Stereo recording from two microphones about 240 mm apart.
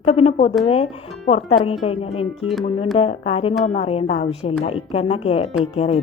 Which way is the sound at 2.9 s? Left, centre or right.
Left.